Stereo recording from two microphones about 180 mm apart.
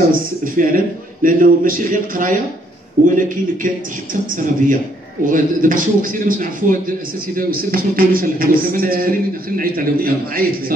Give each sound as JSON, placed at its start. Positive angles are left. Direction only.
{"t": 0.1, "sound": "a man's voice", "side_deg": -50}